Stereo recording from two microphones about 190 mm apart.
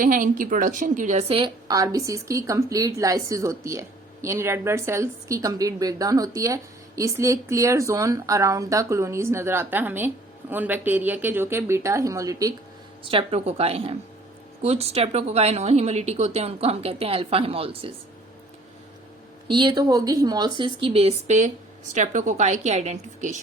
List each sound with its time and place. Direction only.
0.0 s a woman's voice: 45° right (ahead or behind); by 12.5 s 15° right (ahead or behind)
13.1 s speech: 30° right (ahead or behind)
19.5 s speech: 25° right (ahead or behind)